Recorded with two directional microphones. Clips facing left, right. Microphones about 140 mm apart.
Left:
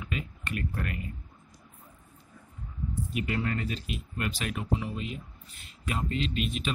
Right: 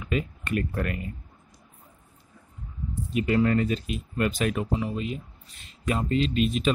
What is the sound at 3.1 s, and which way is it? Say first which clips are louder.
Speech: right 9 dB; 30° right (ahead or behind).